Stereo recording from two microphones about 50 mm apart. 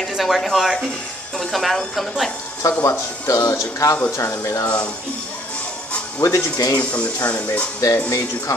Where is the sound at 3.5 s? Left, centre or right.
Left.